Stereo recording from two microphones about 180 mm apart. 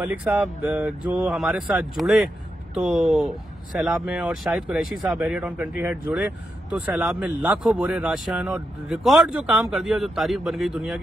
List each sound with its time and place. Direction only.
0.0 s speech: 10° right (ahead or behind)